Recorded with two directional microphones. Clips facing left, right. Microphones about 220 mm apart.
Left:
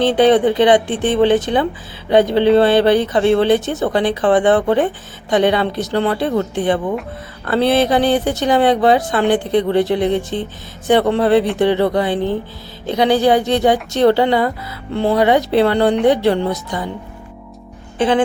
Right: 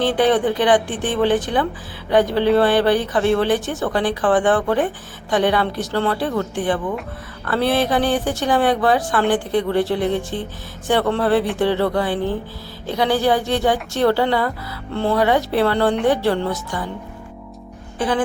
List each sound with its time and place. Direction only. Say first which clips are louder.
0.0 s speech: left 5 dB; 20° left (ahead or behind)
17.9 s speech: left 5 dB; 25° left (ahead or behind)